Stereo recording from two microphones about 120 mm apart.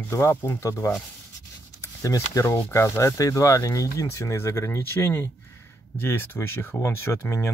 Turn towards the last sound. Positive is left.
turn(degrees=25)  # may be behind; listen again after turning